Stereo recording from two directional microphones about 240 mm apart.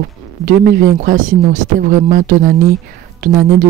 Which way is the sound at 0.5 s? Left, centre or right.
Right.